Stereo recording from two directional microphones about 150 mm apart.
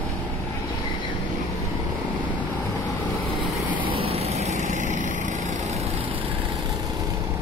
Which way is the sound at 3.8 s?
40° right (ahead or behind).